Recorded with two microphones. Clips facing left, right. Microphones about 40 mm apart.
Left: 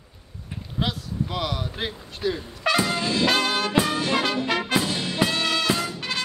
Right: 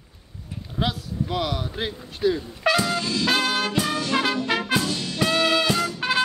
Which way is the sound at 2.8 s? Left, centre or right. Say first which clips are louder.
Left 1 dB; left.